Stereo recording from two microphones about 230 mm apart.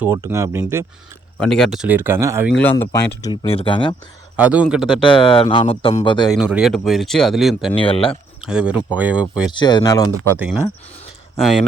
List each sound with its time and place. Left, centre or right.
0.0 s speech: centre
1.4 s speech: centre
2.6 s speech: centre
4.4 s speech: centre
5.0 s speech: left
6.3 s speech: centre
7.8 s speech: left
8.4 s speech: centre
9.5 s speech: centre
10.3 s speech: centre